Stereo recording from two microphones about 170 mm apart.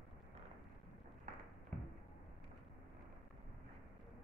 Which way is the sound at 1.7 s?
15° left (ahead or behind).